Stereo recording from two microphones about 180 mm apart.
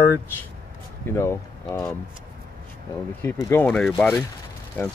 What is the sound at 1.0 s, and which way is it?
Speech, 15° left (ahead or behind).